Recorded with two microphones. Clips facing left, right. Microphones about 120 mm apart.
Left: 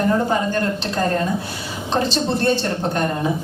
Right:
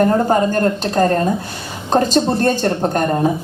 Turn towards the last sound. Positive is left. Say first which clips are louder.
# right 5 dB
turn(degrees=-45)  # may be behind; listen again after turning